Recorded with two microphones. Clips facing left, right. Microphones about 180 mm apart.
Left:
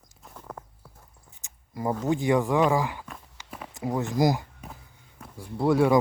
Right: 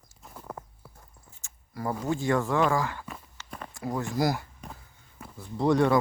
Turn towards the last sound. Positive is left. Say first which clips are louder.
# left 1 dB
turn(degrees=5)  # may be behind; listen again after turning